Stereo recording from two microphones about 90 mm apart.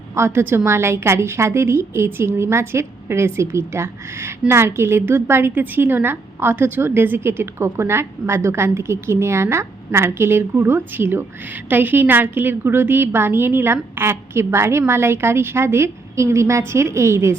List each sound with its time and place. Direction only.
0.1 s a woman's voice: 30° right (ahead or behind)